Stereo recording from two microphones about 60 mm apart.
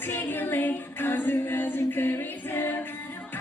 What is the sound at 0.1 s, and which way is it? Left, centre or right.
Music, left.